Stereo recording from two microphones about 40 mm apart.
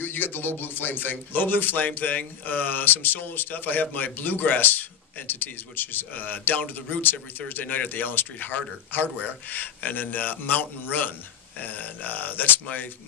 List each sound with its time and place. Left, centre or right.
0.0 s a man's voice: left